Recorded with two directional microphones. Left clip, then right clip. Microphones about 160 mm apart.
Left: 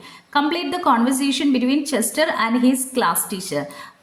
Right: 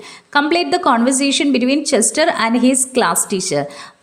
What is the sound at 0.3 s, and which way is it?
A woman's voice, 35° right (ahead or behind).